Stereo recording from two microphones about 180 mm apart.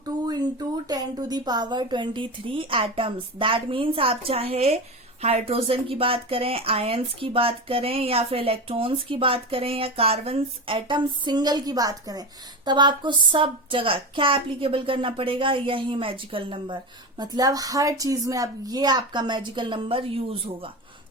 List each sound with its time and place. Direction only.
0.0 s speech: 20° right (ahead or behind)